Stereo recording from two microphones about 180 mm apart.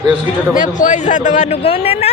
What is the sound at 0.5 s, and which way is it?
A man's voice, 45° left (ahead or behind).